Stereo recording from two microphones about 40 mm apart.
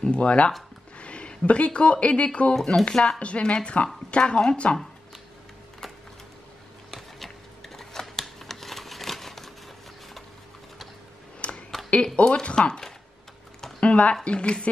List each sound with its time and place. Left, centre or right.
0.0 s speech: left
2.9 s speech: centre
3.2 s speech: left
6.9 s a sound: centre
11.4 s a sound: left
11.9 s speech: left
13.7 s speech: left